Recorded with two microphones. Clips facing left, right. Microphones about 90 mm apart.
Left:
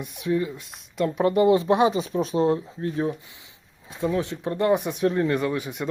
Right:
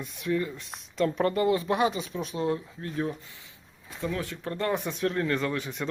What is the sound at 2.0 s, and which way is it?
Speech, 35° left (ahead or behind).